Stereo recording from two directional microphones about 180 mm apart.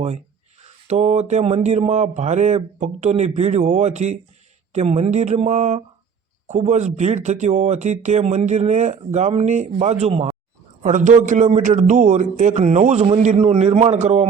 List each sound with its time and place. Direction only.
0.6 s speech: 40° right (ahead or behind)